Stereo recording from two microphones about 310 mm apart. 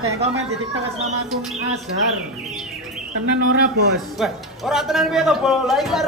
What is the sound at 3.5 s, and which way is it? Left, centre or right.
Speech, right.